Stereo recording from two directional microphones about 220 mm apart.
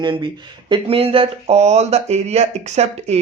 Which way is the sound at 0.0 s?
20° right (ahead or behind).